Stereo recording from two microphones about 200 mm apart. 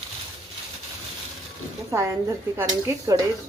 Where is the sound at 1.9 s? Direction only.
15° right (ahead or behind).